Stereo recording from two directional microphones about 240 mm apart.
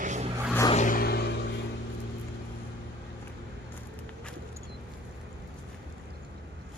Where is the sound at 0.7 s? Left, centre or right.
Left.